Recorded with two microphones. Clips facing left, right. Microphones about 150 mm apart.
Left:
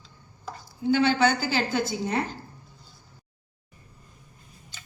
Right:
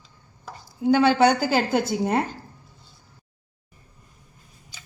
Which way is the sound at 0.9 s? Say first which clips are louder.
Right 4 dB; 50° right (ahead or behind).